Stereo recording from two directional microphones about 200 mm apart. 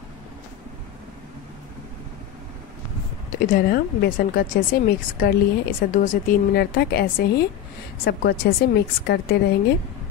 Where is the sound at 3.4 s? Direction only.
50° left (ahead or behind).